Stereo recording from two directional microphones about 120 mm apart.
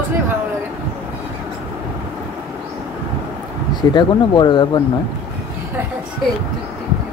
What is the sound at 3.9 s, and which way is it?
Speech, 40° left (ahead or behind).